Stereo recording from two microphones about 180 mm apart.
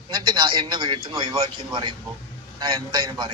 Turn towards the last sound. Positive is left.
turn(degrees=-25)  # may be behind; listen again after turning